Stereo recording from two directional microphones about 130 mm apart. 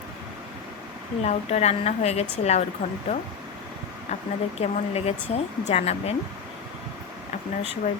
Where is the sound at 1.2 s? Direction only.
55° left (ahead or behind).